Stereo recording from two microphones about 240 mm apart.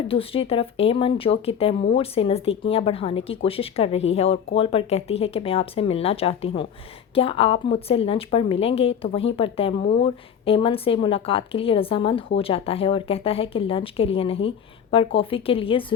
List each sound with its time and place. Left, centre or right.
0.1 s a woman's voice: left